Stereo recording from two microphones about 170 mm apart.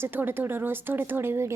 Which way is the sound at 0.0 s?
10° right (ahead or behind).